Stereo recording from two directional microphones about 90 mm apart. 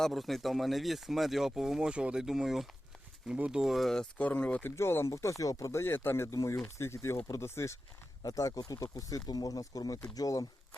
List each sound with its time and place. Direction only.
0.0 s speech: centre (ahead or behind)
4.2 s speech: 15° left (ahead or behind)
4.8 s speech: 30° left (ahead or behind)
5.8 s speech: 25° left (ahead or behind)
8.2 s speech: 40° left (ahead or behind)